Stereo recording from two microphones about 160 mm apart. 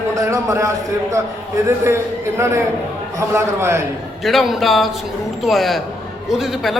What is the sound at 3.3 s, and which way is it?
Speech, 15° right (ahead or behind).